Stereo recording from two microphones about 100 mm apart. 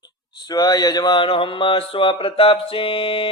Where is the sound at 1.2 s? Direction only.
65° left (ahead or behind).